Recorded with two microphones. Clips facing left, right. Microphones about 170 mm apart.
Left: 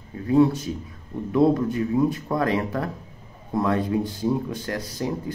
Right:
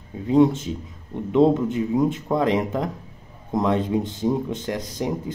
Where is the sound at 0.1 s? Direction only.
20° right (ahead or behind).